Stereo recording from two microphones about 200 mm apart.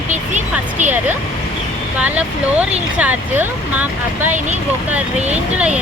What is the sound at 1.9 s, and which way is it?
Speech, 5° right (ahead or behind).